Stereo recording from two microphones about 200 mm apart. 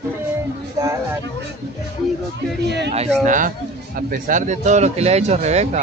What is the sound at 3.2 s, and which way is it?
Speech, 40° right (ahead or behind).